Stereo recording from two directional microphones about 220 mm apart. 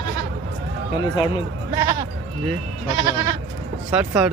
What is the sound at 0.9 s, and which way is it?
Speech, 20° left (ahead or behind).